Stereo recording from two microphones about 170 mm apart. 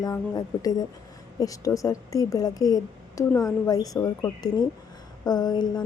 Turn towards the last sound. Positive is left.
turn(degrees=25)  # may be behind; listen again after turning